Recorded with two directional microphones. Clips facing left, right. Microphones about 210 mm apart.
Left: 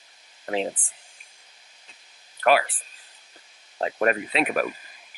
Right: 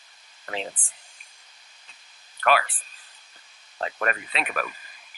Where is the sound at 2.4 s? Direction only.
10° left (ahead or behind).